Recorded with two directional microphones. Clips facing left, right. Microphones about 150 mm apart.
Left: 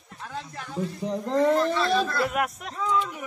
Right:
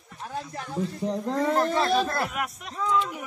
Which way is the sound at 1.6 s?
45° right (ahead or behind).